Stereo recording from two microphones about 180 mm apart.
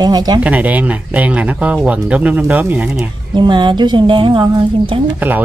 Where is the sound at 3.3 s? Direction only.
25° right (ahead or behind).